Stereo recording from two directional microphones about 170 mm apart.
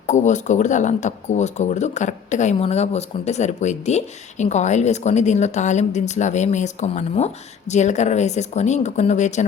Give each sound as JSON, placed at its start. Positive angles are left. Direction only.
{"t": 0.1, "sound": "speech", "side_deg": 45}